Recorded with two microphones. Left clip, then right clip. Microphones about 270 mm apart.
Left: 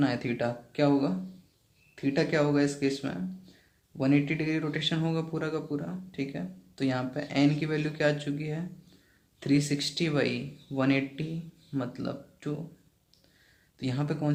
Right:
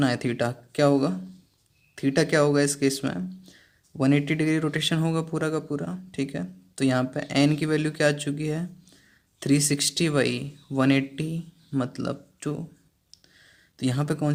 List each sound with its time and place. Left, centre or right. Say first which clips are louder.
0.0 s speech: right 4 dB; right
13.7 s speech: right 5 dB; right